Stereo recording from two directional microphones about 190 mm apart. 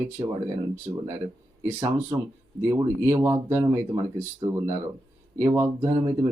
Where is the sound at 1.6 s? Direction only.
10° right (ahead or behind).